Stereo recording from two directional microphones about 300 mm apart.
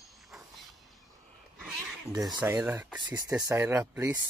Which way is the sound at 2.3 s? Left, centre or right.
Centre.